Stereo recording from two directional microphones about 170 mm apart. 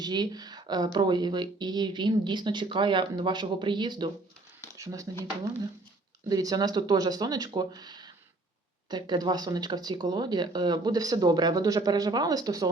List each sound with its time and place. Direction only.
0.0 s speech: 25° right (ahead or behind)
6.2 s speech: 20° right (ahead or behind)